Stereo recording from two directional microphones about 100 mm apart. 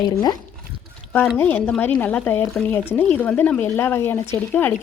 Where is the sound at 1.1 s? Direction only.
20° left (ahead or behind).